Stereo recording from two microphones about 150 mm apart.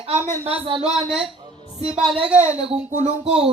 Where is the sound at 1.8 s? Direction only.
45° right (ahead or behind).